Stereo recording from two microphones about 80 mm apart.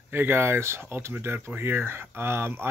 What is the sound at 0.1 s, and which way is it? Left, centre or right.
Speech, right.